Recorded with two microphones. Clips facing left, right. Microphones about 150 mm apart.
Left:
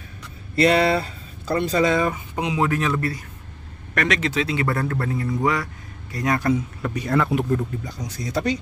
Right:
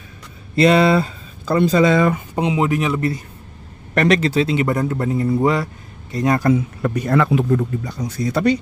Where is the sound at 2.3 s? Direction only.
25° right (ahead or behind).